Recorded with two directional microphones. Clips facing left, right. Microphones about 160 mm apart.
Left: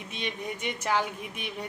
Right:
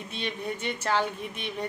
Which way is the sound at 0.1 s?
15° left (ahead or behind).